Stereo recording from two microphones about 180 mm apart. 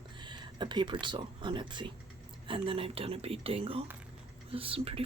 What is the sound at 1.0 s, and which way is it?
Speech, 25° right (ahead or behind).